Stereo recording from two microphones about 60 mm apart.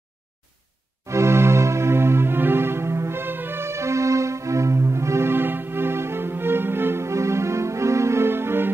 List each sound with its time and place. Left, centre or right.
1.0 s music: right